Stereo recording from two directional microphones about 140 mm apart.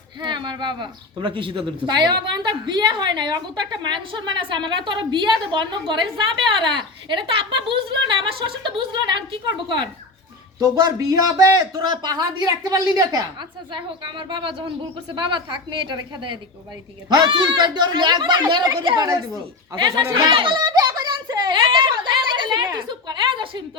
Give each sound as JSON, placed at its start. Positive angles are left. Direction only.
{"t": 0.2, "sound": "a woman's voice", "side_deg": -30}
{"t": 10.6, "sound": "a woman's voice", "side_deg": -25}
{"t": 19.7, "sound": "a sound", "side_deg": -35}